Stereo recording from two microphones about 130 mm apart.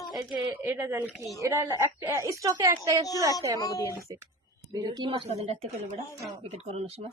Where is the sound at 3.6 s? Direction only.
30° left (ahead or behind).